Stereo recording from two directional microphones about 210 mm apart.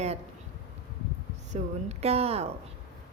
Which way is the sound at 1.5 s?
30° right (ahead or behind).